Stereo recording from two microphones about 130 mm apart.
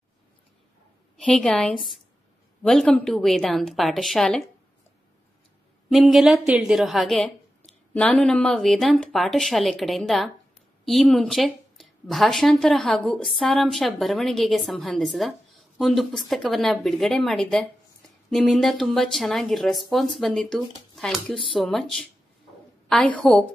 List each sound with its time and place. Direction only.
1.1 s a woman's voice: 5° left (ahead or behind)
5.9 s a woman's voice: centre (ahead or behind)